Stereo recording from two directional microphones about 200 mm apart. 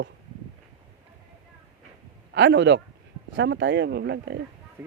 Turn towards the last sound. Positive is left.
turn(degrees=-60)  # may be behind; listen again after turning